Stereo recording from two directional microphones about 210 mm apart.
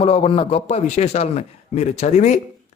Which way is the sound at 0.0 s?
30° left (ahead or behind).